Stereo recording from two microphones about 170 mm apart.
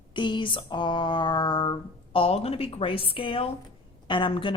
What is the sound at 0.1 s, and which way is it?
Speech, 30° left (ahead or behind).